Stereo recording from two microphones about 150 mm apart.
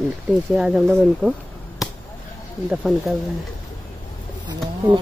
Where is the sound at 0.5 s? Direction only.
5° right (ahead or behind).